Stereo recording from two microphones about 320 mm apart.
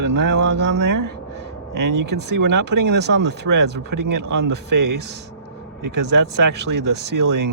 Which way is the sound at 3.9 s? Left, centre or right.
Right.